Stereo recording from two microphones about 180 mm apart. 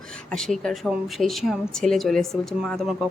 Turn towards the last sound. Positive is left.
turn(degrees=0)  # may be behind; listen again after turning